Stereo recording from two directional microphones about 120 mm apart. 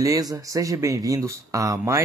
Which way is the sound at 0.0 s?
30° right (ahead or behind).